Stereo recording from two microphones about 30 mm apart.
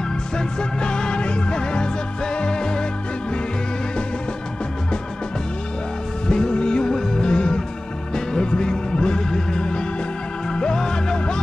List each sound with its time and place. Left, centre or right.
0.4 s music: left
6.2 s music: left
9.6 s organ: left
10.5 s music: left